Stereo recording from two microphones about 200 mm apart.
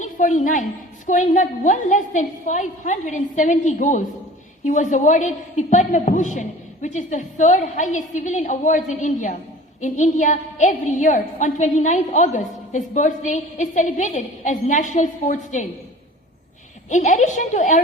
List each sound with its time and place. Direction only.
0.0 s a woman's voice: 40° left (ahead or behind)
16.9 s a woman's voice: 35° left (ahead or behind)